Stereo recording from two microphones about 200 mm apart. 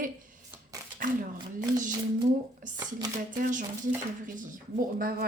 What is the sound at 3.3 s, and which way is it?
Speech, 40° right (ahead or behind).